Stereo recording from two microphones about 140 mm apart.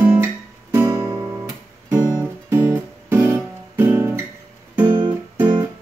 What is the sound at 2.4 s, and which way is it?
Guitar, 20° right (ahead or behind).